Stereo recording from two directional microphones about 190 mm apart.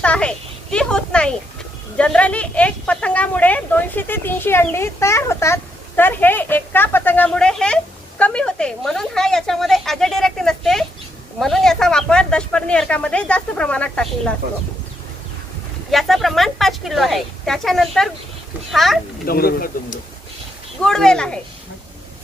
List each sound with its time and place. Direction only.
0.0 s a child's voice: 5° left (ahead or behind)
15.9 s speech: centre (ahead or behind)
19.2 s speech: 50° left (ahead or behind)
20.8 s speech: 5° left (ahead or behind)